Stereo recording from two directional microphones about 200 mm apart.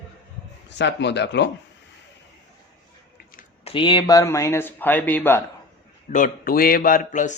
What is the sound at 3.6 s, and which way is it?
Speech, 25° left (ahead or behind).